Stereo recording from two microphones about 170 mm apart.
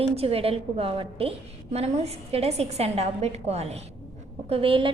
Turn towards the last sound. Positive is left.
turn(degrees=-30)  # may be behind; listen again after turning